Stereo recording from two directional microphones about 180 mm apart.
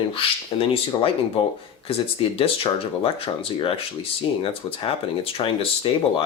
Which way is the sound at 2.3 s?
30° left (ahead or behind).